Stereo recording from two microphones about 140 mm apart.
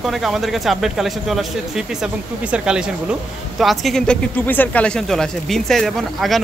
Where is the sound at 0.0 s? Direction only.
Centre (ahead or behind).